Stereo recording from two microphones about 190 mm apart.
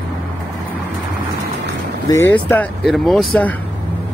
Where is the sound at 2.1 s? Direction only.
15° left (ahead or behind).